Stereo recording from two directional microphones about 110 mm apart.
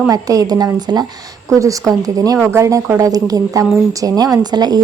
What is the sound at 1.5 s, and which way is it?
A woman's voice, 30° right (ahead or behind).